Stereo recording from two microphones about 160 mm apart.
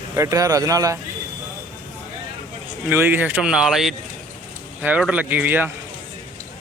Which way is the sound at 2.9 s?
15° right (ahead or behind).